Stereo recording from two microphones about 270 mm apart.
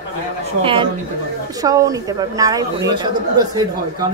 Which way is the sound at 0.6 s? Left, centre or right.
Centre.